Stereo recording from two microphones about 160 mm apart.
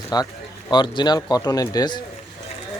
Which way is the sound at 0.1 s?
25° left (ahead or behind).